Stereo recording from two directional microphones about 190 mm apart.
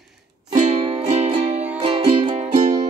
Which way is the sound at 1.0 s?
35° right (ahead or behind).